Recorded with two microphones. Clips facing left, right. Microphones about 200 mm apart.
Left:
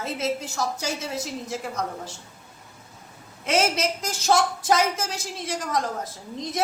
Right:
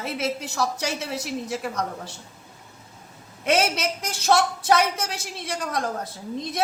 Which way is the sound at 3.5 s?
60° right (ahead or behind).